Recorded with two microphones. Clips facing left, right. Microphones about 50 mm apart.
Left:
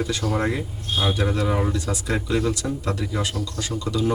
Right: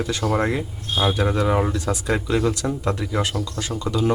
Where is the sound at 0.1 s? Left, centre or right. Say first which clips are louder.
Right 2 dB; right.